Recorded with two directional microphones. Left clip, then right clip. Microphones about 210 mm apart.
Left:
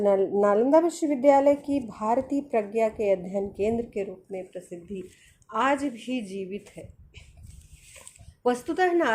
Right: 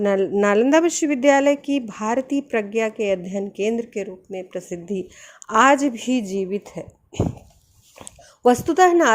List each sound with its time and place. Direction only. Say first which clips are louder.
0.0 s a woman's voice: right 3 dB; 40° right (ahead or behind)
8.4 s a woman's voice: right 9 dB; 35° right (ahead or behind)